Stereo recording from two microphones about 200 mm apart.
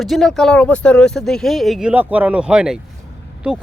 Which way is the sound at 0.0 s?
Centre (ahead or behind).